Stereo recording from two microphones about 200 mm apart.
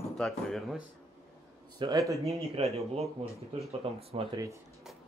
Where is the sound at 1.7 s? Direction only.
20° right (ahead or behind).